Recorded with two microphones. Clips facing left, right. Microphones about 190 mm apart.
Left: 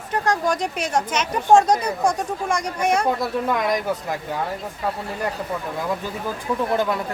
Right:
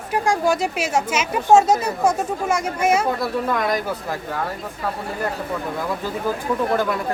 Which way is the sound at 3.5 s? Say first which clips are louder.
Left 1 dB; 20° left (ahead or behind).